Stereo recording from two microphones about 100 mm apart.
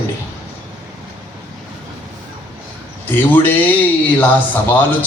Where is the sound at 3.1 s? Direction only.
20° left (ahead or behind).